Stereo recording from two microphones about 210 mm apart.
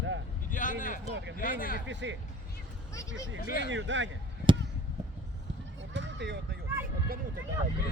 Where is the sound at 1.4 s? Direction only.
40° left (ahead or behind).